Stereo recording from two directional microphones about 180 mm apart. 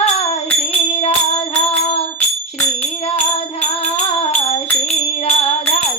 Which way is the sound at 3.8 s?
35° left (ahead or behind).